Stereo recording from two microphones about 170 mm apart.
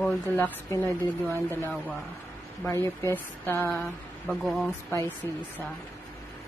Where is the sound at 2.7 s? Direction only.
15° left (ahead or behind).